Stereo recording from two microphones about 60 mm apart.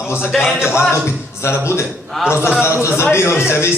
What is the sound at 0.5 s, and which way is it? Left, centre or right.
Speech, left.